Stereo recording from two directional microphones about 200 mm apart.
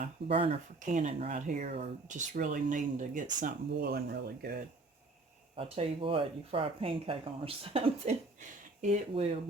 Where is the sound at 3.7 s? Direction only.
50° right (ahead or behind).